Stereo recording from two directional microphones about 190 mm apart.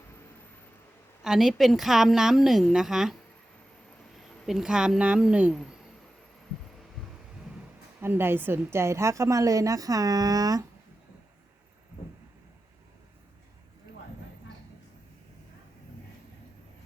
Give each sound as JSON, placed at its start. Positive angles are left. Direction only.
{"t": 1.2, "sound": "a woman's voice", "side_deg": 0}
{"t": 4.2, "sound": "speech", "side_deg": 0}
{"t": 8.0, "sound": "a woman's voice", "side_deg": -10}